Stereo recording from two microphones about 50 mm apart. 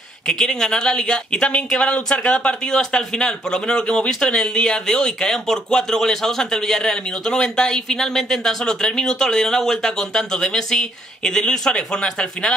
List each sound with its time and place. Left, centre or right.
0.3 s speech: centre